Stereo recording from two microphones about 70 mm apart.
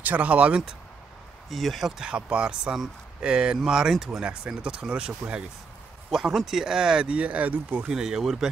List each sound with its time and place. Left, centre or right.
0.0 s speech: right
1.5 s speech: centre; by 7.8 s right
7.9 s speech: centre